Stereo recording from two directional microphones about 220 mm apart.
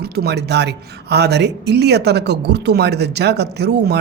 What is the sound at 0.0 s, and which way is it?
Speech, 45° right (ahead or behind).